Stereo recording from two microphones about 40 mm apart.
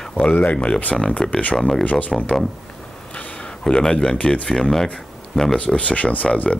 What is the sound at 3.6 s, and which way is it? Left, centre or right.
Speech, centre.